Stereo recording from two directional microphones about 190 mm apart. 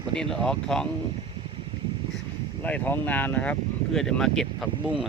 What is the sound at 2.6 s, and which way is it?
Speech, 10° left (ahead or behind).